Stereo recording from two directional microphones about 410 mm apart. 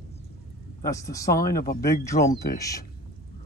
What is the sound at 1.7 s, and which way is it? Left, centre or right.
Speech, left.